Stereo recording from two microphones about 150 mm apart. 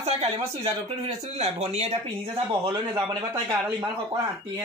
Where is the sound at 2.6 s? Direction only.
25° right (ahead or behind).